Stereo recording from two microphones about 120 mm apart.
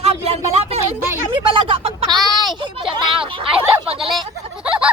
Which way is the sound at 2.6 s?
45° right (ahead or behind).